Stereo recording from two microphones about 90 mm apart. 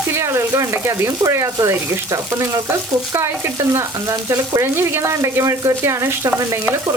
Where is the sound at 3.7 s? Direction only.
35° right (ahead or behind).